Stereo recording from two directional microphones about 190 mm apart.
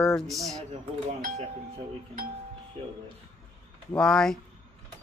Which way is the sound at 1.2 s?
40° right (ahead or behind).